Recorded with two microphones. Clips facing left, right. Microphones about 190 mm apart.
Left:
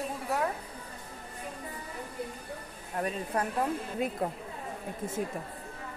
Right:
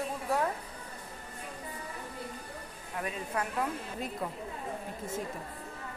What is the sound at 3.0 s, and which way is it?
Speech, 35° left (ahead or behind).